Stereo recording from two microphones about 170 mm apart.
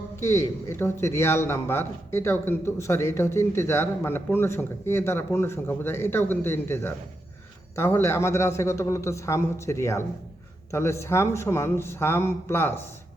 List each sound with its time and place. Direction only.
0.2 s a man's voice: 15° left (ahead or behind)